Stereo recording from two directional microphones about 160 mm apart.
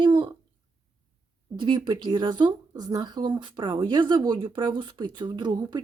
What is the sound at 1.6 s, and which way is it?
Speech, 25° right (ahead or behind).